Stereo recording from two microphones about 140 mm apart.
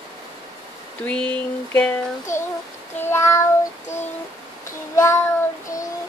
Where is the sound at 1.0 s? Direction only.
10° left (ahead or behind).